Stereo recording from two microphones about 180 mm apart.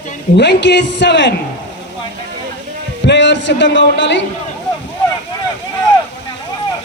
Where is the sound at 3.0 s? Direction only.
75° left (ahead or behind).